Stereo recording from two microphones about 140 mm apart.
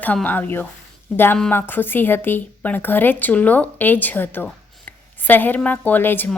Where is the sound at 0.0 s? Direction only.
10° left (ahead or behind).